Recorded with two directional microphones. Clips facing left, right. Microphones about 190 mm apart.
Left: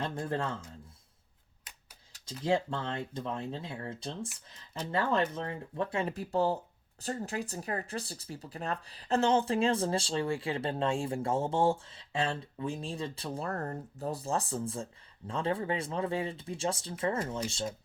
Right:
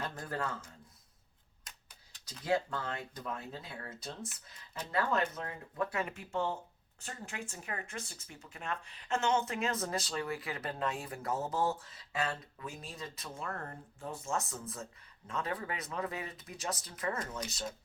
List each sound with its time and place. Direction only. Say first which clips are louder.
0.0 s speech: left 5 dB; 25° left (ahead or behind)
2.4 s speech: left 3 dB; 25° left (ahead or behind)